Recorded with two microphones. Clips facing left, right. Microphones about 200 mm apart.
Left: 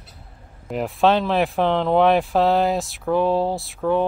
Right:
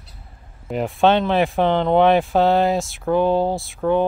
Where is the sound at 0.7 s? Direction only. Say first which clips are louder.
Right 1 dB; centre (ahead or behind).